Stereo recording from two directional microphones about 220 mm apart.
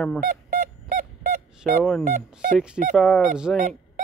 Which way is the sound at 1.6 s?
5° left (ahead or behind).